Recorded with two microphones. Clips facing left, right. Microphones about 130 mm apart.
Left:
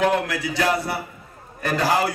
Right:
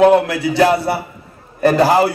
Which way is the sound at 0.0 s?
30° right (ahead or behind).